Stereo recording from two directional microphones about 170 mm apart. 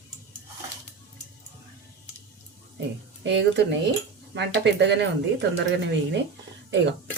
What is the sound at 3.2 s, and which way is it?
Speech, 90° right.